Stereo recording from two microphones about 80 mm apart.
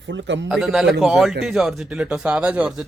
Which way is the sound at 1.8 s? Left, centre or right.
Centre.